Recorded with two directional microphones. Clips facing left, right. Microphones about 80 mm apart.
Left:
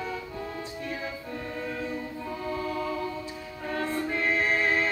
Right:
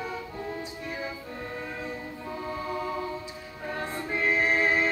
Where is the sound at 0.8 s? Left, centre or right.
Centre.